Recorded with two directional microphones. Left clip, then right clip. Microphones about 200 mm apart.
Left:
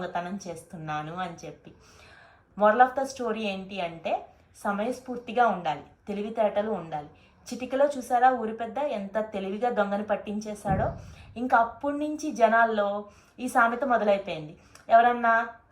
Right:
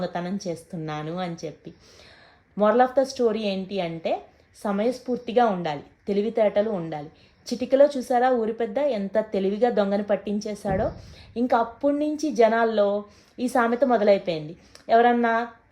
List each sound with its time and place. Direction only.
0.0 s a woman's voice: 45° right (ahead or behind)
2.6 s a woman's voice: 45° right (ahead or behind)